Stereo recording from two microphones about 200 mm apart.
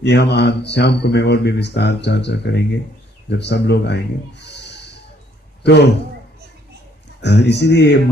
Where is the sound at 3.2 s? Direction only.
60° left (ahead or behind).